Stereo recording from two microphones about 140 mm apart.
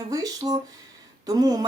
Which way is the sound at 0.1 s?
25° right (ahead or behind).